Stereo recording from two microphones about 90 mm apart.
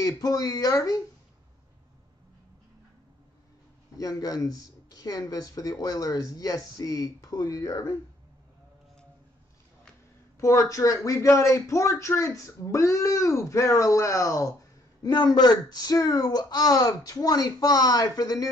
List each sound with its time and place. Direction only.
0.0 s speech: 45° left (ahead or behind)
3.9 s speech: 40° left (ahead or behind)
10.4 s speech: 35° left (ahead or behind)
15.0 s speech: 50° left (ahead or behind)